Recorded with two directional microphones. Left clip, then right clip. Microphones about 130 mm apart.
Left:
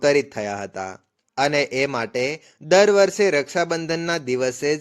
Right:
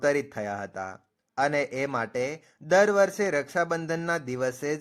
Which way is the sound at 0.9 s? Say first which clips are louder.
Left 5 dB; 45° left (ahead or behind).